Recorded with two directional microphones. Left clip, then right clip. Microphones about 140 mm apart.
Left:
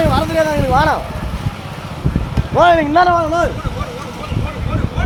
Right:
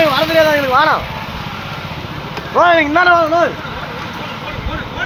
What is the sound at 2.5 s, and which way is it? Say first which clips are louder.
Speech: even; 35° left (ahead or behind).